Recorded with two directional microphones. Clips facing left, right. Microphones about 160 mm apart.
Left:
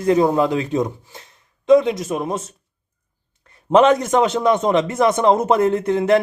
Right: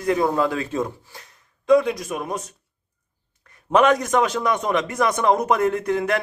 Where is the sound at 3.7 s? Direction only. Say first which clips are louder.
Left 4 dB; 25° left (ahead or behind).